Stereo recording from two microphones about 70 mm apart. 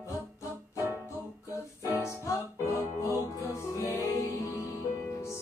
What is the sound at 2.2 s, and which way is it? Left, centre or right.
Music, left.